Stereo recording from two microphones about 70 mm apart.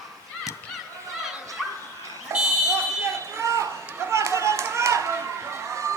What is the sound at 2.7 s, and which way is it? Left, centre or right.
Smoke detector, right.